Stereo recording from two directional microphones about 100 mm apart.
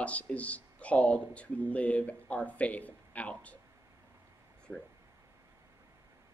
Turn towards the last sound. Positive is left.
turn(degrees=0)  # may be behind; listen again after turning